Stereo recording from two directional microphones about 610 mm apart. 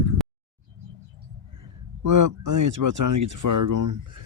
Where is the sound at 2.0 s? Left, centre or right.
Right.